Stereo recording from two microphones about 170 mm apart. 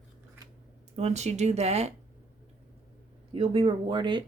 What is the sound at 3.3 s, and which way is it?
Speech, 35° right (ahead or behind).